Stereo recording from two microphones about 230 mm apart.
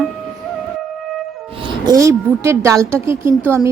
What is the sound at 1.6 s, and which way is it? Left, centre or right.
Speech, centre.